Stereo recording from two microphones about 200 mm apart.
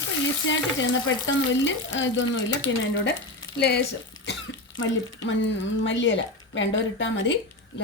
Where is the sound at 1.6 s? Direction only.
65° left (ahead or behind).